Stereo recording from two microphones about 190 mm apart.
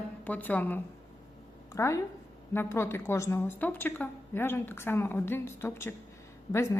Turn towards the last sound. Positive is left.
turn(degrees=15)  # may be behind; listen again after turning